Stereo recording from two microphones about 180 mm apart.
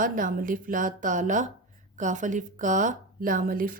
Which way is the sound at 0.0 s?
50° right (ahead or behind).